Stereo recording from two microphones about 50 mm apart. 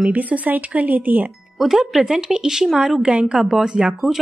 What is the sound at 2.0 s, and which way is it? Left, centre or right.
A woman's voice, centre.